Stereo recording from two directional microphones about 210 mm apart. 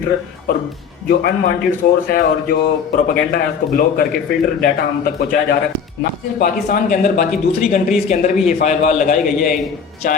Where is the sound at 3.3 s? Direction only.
45° left (ahead or behind).